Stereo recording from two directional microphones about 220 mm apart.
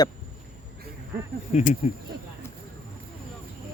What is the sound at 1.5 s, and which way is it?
Speech, 35° left (ahead or behind).